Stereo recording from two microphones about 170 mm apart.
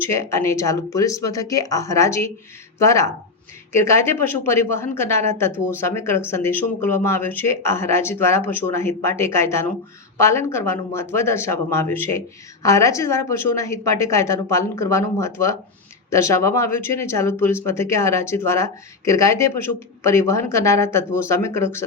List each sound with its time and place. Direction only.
0.0 s speech: 15° left (ahead or behind)